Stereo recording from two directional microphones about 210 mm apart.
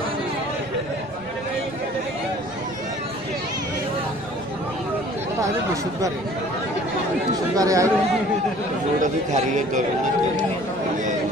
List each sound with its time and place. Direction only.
7.5 s speech: 15° right (ahead or behind)
9.0 s speech: 35° right (ahead or behind)